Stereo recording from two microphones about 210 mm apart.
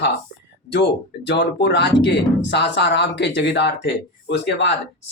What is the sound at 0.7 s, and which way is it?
Speech, 55° left (ahead or behind).